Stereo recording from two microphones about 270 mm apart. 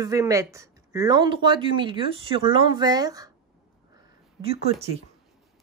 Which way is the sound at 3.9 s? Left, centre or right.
Centre.